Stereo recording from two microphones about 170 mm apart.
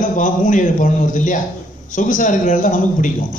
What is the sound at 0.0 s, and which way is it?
A man's voice, 50° left (ahead or behind).